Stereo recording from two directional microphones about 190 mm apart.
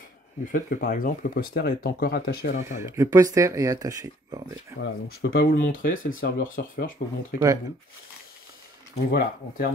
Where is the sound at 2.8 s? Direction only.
15° right (ahead or behind).